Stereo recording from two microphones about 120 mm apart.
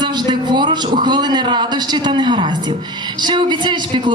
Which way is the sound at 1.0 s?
35° right (ahead or behind).